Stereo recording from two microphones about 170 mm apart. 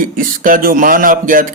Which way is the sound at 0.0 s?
55° right (ahead or behind).